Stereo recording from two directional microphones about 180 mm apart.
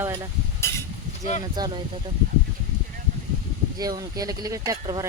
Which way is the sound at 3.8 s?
20° right (ahead or behind).